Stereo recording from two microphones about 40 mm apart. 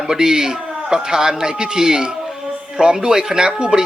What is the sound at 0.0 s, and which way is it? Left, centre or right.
Speech, centre.